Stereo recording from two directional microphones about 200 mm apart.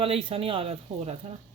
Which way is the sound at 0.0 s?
25° right (ahead or behind).